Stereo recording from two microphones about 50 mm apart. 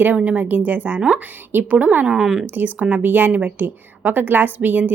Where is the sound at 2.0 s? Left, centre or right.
Centre.